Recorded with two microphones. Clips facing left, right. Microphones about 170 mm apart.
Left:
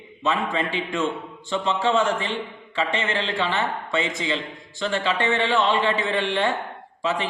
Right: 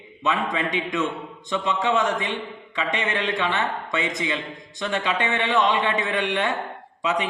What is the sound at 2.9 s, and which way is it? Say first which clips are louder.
Speech: even; 15° right (ahead or behind).